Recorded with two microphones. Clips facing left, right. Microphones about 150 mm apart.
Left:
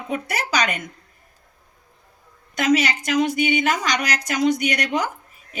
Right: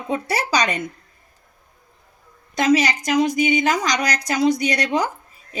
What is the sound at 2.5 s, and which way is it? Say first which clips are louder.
Speech: right 2 dB; 30° right (ahead or behind).